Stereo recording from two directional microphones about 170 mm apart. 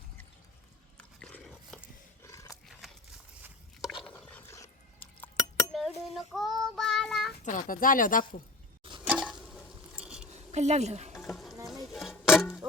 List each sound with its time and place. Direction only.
0.9 s a sound: 5° left (ahead or behind)
2.2 s wild animals: 20° left (ahead or behind)
3.4 s a sound: centre (ahead or behind)
4.1 s dog: 10° left (ahead or behind)
5.7 s child singing: centre (ahead or behind)
7.4 s speech: 50° left (ahead or behind)
9.0 s a sound: 5° right (ahead or behind)
10.3 s speech: 40° right (ahead or behind)
11.9 s music: centre (ahead or behind)